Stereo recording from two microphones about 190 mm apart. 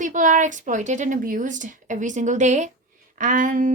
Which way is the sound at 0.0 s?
40° right (ahead or behind).